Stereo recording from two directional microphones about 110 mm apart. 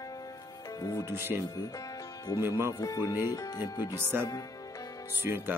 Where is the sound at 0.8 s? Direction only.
35° left (ahead or behind).